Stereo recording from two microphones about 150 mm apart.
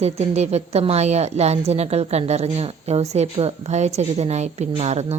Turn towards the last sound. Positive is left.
turn(degrees=-45)  # may be behind; listen again after turning